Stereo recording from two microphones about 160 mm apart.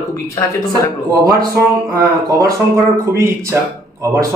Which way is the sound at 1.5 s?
20° right (ahead or behind).